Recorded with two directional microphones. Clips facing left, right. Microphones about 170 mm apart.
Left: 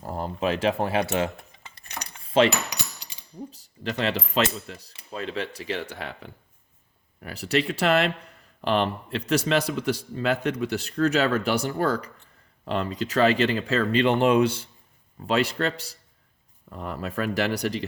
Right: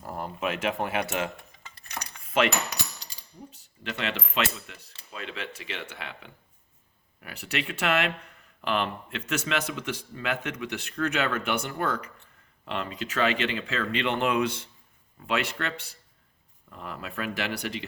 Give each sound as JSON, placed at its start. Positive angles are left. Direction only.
{"t": 0.0, "sound": "speech", "side_deg": 30}
{"t": 2.3, "sound": "speech", "side_deg": 30}
{"t": 3.5, "sound": "speech", "side_deg": 35}